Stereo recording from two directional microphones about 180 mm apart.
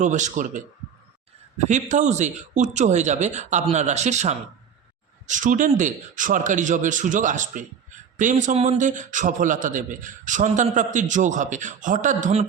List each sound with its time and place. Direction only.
0.0 s a man's voice: 45° right (ahead or behind)